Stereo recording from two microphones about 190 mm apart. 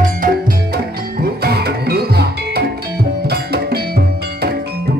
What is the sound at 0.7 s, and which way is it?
Music, 55° right (ahead or behind).